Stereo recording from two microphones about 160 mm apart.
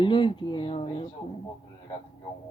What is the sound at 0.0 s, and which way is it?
Speech, 30° left (ahead or behind).